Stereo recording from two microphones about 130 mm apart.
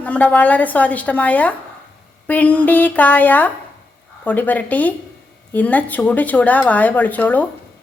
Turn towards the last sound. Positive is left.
turn(degrees=15)  # may be behind; listen again after turning